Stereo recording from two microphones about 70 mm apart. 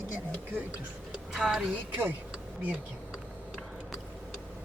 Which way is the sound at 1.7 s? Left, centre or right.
Right.